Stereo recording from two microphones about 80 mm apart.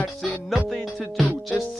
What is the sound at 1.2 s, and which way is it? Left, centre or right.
Music, centre.